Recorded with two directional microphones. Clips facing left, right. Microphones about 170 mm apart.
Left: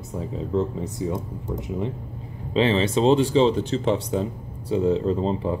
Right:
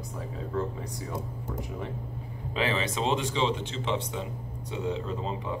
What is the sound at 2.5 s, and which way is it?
Speech, 30° left (ahead or behind).